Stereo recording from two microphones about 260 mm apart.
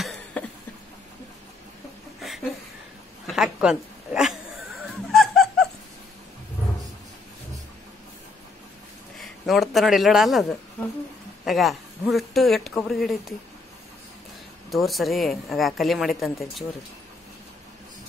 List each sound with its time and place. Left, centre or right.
0.0 s a sound: centre
3.3 s a sound: centre
4.8 s music: centre
9.2 s a man's voice: centre
11.4 s speech: centre
14.7 s speech: centre